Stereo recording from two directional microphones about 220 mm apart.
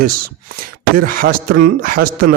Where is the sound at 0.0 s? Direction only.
40° right (ahead or behind).